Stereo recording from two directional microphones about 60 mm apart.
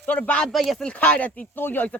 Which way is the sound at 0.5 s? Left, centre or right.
Centre.